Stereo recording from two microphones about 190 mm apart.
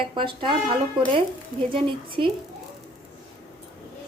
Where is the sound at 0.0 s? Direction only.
25° right (ahead or behind).